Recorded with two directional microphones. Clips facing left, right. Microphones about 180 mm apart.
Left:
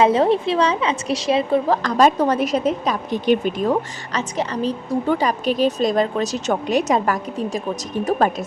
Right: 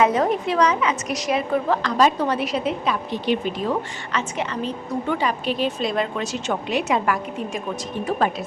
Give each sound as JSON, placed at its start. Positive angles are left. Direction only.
{"t": 0.0, "sound": "a woman's voice", "side_deg": 30}